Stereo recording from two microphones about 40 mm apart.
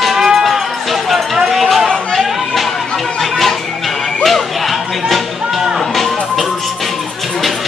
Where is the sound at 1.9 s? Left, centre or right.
Centre.